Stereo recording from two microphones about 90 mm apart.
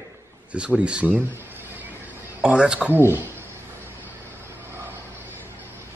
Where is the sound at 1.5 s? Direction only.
20° right (ahead or behind).